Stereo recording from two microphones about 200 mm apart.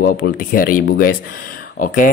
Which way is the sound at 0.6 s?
45° left (ahead or behind).